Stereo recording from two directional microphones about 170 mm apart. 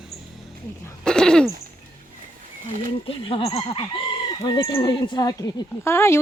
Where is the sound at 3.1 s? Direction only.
30° left (ahead or behind).